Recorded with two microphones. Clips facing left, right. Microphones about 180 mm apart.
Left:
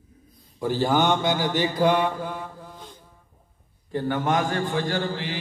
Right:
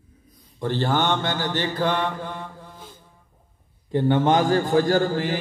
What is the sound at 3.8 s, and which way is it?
A man's voice, 25° right (ahead or behind).